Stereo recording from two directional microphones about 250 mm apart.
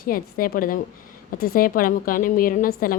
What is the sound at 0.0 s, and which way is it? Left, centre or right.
A woman's voice, left.